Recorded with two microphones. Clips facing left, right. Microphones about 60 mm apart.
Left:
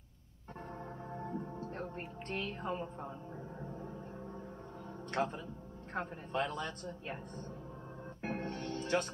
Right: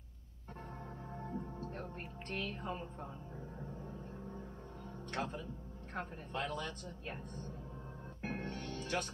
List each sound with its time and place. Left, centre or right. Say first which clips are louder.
1.2 s music: left 2 dB; centre
5.1 s music: left 5 dB; centre
8.2 s music: left 3 dB; centre